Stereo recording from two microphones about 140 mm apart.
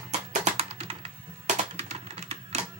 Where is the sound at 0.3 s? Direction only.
50° right (ahead or behind).